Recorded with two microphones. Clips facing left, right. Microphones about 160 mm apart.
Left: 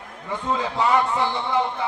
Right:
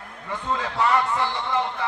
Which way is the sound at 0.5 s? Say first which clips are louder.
Left 1 dB; 15° left (ahead or behind).